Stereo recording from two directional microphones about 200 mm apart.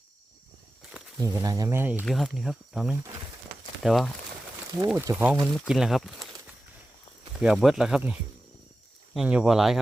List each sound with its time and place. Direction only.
1.2 s speech: 15° right (ahead or behind); by 6.2 s centre (ahead or behind)
7.4 s speech: centre (ahead or behind)